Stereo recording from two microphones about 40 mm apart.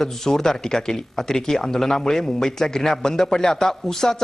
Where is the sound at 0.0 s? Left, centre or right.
Centre.